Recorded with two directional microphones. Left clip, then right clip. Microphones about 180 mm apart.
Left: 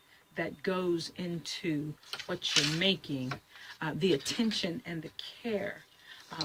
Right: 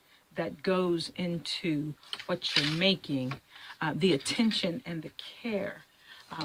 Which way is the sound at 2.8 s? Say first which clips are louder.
Right 3 dB; 45° right (ahead or behind).